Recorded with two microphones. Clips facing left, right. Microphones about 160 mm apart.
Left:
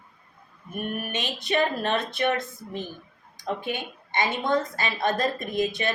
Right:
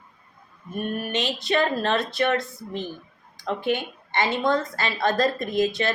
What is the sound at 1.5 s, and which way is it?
A woman's voice, 20° left (ahead or behind).